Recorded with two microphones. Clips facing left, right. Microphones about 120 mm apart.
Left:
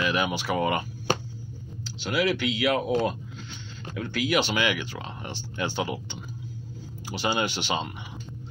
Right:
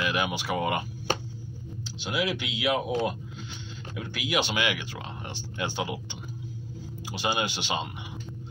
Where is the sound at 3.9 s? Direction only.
15° right (ahead or behind).